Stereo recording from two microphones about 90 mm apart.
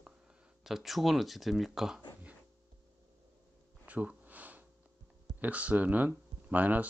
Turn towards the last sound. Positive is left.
turn(degrees=-20)  # may be behind; listen again after turning